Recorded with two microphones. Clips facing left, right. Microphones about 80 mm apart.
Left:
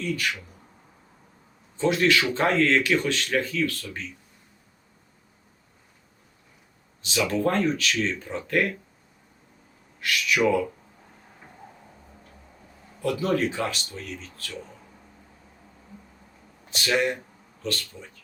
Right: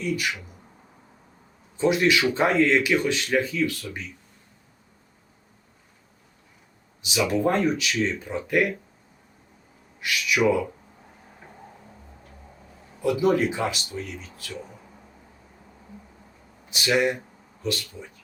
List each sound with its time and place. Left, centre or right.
0.0 s speech: centre
1.7 s speech: centre
7.0 s speech: centre
10.0 s speech: centre
13.0 s speech: centre
16.6 s speech: centre